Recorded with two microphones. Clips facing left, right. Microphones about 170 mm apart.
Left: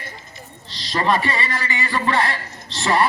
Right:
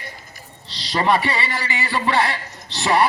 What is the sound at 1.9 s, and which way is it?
Speech, 20° right (ahead or behind).